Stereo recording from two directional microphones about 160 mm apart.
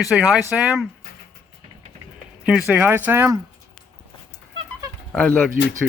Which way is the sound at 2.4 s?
5° right (ahead or behind).